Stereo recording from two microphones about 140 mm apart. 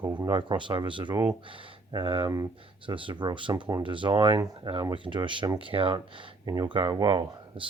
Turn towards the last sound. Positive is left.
turn(degrees=-35)  # may be behind; listen again after turning